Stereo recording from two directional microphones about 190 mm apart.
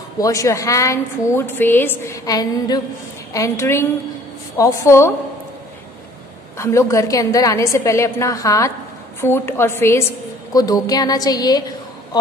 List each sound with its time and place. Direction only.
0.2 s a woman's voice: 15° left (ahead or behind)
6.6 s a woman's voice: 15° left (ahead or behind)